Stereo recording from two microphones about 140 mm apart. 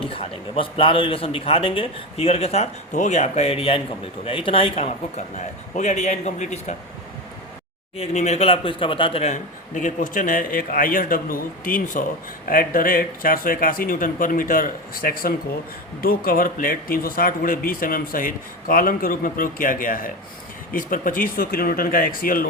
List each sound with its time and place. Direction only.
0.0 s a man's voice: 40° left (ahead or behind)
7.9 s speech: 55° left (ahead or behind)
9.3 s a man's voice: 65° left (ahead or behind)
12.5 s speech: 90° left